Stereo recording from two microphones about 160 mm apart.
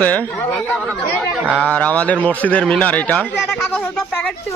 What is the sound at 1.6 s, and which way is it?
Speech, 10° left (ahead or behind).